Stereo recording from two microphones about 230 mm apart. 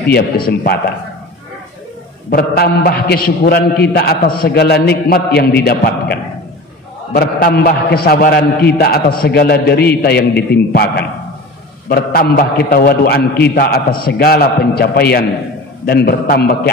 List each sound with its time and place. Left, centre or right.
0.5 s a man's voice: left
2.3 s a man's voice: left
7.2 s a man's voice: left